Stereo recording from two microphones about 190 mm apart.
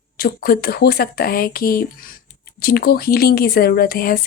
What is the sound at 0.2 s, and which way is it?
A woman's voice, 50° left (ahead or behind).